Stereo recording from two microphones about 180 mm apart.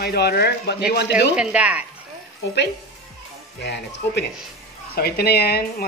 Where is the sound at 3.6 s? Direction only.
65° left (ahead or behind).